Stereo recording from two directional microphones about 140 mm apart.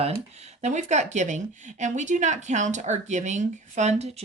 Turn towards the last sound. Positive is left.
turn(degrees=-50)  # may be behind; listen again after turning